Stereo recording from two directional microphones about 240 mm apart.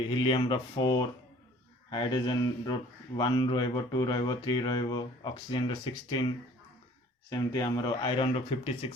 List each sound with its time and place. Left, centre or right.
0.1 s speech: left
7.3 s speech: centre